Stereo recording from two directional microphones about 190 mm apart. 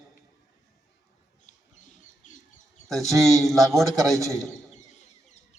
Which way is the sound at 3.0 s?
15° right (ahead or behind).